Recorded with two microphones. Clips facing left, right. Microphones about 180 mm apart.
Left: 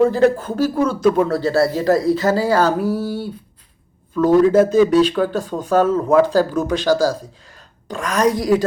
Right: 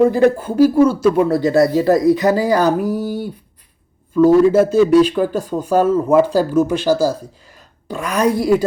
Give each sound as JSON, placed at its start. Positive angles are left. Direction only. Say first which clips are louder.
{"t": 0.1, "sound": "speech", "louder": "right 1 dB", "side_deg": -10}